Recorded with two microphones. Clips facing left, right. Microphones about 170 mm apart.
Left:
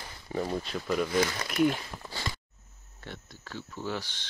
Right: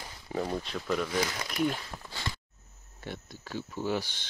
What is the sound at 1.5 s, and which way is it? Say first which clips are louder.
Speech: left 4 dB; 5° left (ahead or behind).